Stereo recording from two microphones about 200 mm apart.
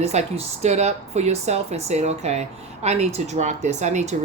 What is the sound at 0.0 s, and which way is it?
Speech, 35° right (ahead or behind).